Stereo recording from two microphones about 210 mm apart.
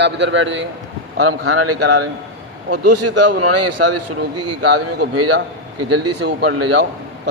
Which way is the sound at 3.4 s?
90° right.